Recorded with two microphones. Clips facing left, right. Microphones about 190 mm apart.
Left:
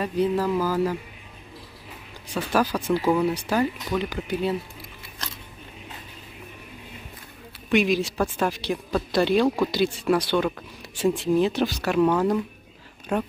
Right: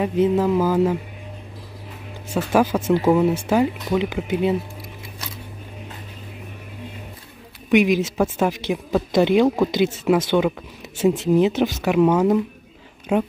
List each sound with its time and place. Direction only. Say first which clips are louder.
0.0 s speech: right 5 dB; 20° right (ahead or behind)
2.2 s speech: right 5 dB; 25° right (ahead or behind)
7.7 s speech: right 4 dB; 15° right (ahead or behind)
13.1 s a woman's voice: right 5 dB; 10° right (ahead or behind)